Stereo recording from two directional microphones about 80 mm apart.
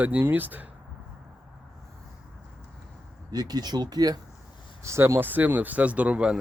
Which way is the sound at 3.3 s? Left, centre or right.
Right.